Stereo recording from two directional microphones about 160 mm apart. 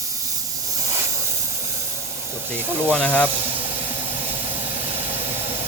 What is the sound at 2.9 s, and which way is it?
Speech, 10° left (ahead or behind).